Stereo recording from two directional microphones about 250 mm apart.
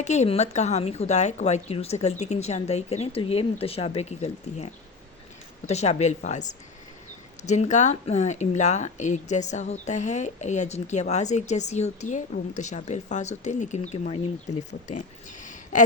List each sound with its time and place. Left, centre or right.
0.0 s speech: left